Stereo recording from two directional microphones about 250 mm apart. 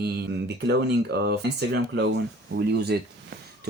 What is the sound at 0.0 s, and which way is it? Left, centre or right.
Speech, right.